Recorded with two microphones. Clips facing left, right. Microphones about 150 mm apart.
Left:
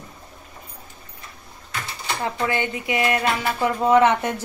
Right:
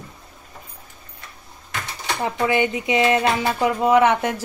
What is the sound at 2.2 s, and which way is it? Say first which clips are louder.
Speech: right 4 dB; 20° right (ahead or behind).